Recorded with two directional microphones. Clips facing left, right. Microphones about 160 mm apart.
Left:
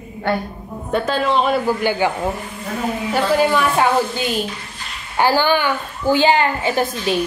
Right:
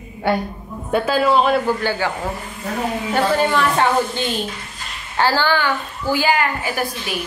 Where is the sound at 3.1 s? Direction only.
10° left (ahead or behind).